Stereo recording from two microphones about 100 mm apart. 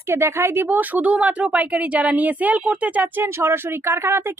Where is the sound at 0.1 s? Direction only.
25° right (ahead or behind).